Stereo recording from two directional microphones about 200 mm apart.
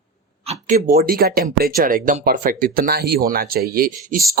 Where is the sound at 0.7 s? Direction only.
45° right (ahead or behind).